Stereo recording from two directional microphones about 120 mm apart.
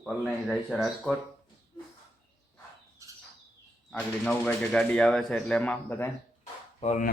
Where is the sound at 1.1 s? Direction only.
Centre (ahead or behind).